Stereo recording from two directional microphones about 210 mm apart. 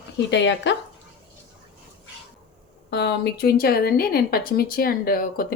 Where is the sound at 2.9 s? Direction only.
50° left (ahead or behind).